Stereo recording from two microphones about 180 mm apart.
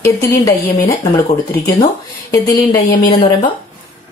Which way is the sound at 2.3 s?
20° left (ahead or behind).